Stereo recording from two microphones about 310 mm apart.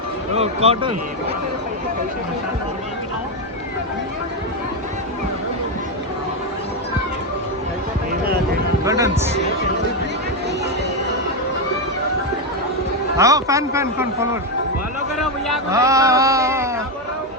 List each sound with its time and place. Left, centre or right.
0.3 s speech: centre
8.8 s a man's voice: centre
13.1 s a man's voice: centre
15.7 s a man's voice: centre